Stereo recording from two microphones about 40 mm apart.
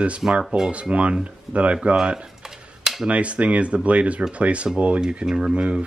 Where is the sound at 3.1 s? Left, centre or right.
Right.